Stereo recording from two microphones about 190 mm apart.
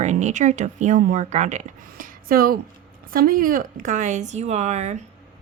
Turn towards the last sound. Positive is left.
turn(degrees=-35)  # may be behind; listen again after turning